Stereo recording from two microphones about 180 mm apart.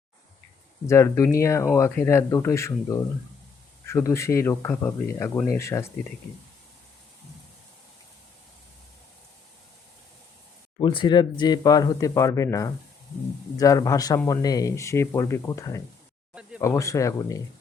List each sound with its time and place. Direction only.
0.9 s speech: 15° left (ahead or behind)
10.8 s speech: 25° left (ahead or behind)
16.3 s a sound: 5° right (ahead or behind)
16.6 s speech: 15° left (ahead or behind)